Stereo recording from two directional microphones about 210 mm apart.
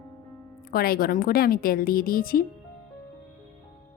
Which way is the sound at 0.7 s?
45° left (ahead or behind).